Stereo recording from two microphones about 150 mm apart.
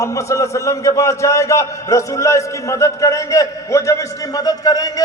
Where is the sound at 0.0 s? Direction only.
20° left (ahead or behind).